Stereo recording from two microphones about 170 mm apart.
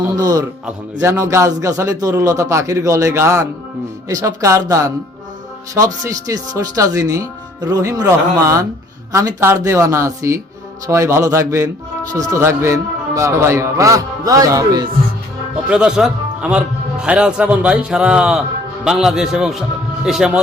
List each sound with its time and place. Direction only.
0.2 s speech: 20° right (ahead or behind)
15.7 s a man's voice: 5° right (ahead or behind)